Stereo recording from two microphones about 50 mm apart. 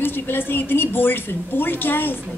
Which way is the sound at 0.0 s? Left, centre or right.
Left.